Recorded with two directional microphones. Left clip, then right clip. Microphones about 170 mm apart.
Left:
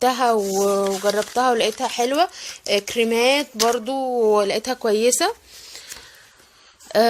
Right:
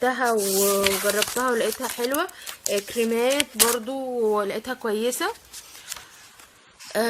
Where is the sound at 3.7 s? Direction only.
15° left (ahead or behind).